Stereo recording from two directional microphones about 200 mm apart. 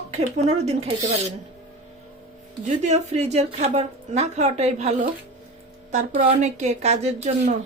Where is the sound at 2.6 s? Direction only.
35° right (ahead or behind).